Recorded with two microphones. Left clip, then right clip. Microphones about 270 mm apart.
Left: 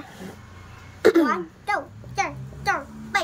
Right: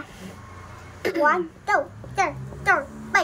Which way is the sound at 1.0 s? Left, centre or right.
Left.